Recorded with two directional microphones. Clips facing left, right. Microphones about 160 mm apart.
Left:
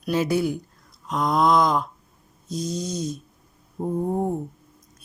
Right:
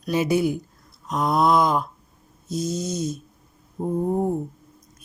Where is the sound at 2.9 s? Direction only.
50° right (ahead or behind).